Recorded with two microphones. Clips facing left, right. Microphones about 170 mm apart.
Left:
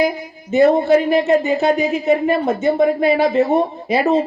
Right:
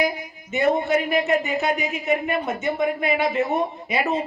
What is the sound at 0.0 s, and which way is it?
A man's voice, 30° left (ahead or behind).